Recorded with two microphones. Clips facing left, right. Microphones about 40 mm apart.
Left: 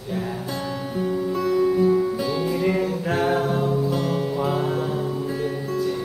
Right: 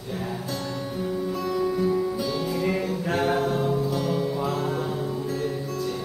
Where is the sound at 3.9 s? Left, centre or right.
Centre.